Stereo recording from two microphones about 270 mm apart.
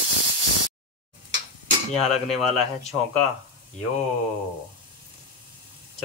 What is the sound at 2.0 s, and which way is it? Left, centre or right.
Speech, left.